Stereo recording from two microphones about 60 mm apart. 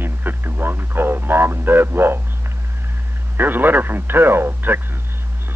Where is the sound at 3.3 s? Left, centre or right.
Right.